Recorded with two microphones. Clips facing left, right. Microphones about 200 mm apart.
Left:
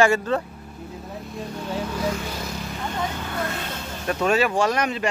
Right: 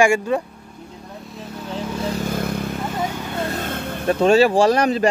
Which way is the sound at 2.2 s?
55° right (ahead or behind).